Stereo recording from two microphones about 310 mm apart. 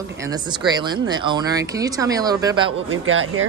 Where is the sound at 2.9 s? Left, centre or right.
Right.